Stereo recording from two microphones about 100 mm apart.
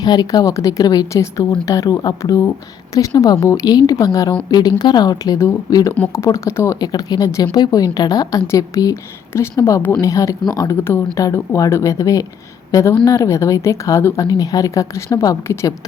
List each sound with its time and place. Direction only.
0.0 s a woman's voice: 40° left (ahead or behind)
5.9 s a woman's voice: 25° left (ahead or behind); by 10.8 s 40° left (ahead or behind)
10.8 s a woman's voice: 25° left (ahead or behind)